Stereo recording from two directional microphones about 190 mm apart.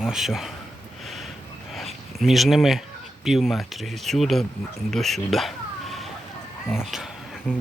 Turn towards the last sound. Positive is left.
turn(degrees=0)  # may be behind; listen again after turning